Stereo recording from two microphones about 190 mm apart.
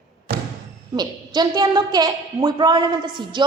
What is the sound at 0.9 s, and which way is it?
A woman's voice, 20° right (ahead or behind).